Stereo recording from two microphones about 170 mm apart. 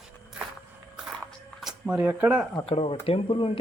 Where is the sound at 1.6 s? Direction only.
5° right (ahead or behind).